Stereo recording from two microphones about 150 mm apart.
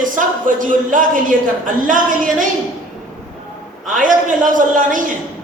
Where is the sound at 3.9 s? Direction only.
60° right (ahead or behind).